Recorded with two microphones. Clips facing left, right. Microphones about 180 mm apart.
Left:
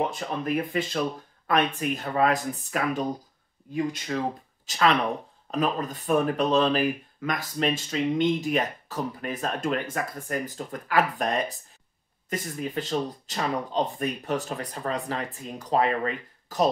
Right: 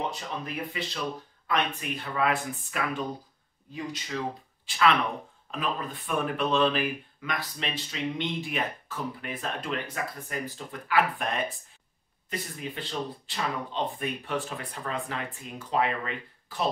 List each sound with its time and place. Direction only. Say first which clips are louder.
0.1 s speech: left 7 dB; 50° left (ahead or behind)
3.7 s speech: left 7 dB; 50° left (ahead or behind)
4.6 s speech: left 2 dB; 40° left (ahead or behind)